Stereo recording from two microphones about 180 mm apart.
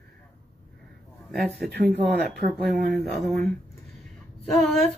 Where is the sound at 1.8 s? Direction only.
60° right (ahead or behind).